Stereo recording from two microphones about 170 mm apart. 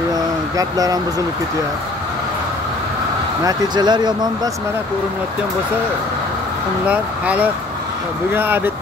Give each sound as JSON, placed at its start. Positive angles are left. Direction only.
{"t": 0.1, "sound": "a sound", "side_deg": -20}
{"t": 3.4, "sound": "speech", "side_deg": -25}
{"t": 6.9, "sound": "speech", "side_deg": -10}